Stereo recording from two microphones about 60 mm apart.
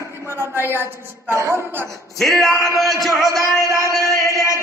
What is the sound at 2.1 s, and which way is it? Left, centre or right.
Speech, centre.